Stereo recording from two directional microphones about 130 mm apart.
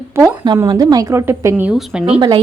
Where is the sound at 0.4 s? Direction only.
35° right (ahead or behind); by 2.0 s 15° right (ahead or behind).